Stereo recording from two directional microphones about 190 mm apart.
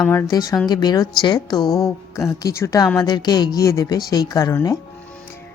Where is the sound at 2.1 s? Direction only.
15° left (ahead or behind).